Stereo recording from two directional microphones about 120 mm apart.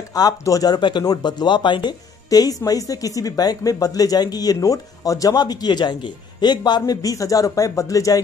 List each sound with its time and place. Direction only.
0.1 s speech: 30° left (ahead or behind)